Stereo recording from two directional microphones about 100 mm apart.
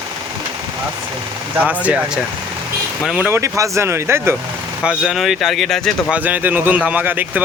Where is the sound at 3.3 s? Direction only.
30° right (ahead or behind).